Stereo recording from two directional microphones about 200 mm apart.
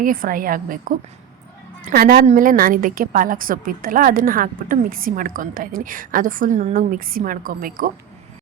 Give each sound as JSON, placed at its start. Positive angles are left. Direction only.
{"t": 0.0, "sound": "a woman's voice", "side_deg": -45}